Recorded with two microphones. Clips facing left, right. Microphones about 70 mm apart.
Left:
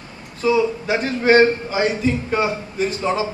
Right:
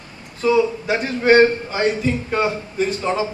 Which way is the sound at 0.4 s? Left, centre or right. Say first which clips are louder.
Right 1 dB; centre.